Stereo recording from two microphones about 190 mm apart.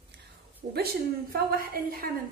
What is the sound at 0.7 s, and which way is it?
A woman's voice, 55° right (ahead or behind).